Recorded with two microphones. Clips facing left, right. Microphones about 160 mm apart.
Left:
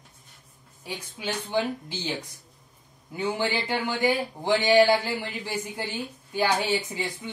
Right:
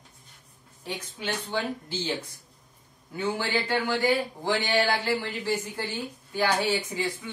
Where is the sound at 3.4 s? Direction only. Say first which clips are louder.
Even; 20° left (ahead or behind).